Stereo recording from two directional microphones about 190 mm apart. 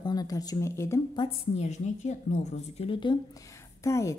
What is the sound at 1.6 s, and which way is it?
A woman's voice, 35° left (ahead or behind).